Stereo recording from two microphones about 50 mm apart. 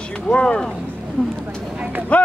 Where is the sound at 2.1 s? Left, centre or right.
Left.